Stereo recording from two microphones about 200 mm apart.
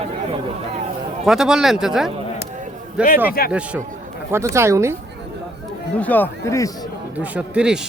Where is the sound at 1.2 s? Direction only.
5° right (ahead or behind).